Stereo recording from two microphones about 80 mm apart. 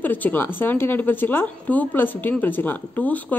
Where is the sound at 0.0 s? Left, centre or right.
Left.